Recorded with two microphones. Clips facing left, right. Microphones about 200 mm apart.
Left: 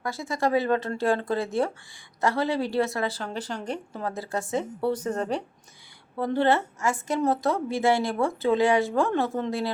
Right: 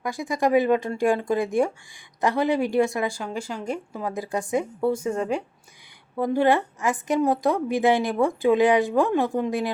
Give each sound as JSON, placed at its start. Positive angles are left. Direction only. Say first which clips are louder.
{"t": 0.0, "sound": "a woman's voice", "louder": "right 3 dB", "side_deg": -15}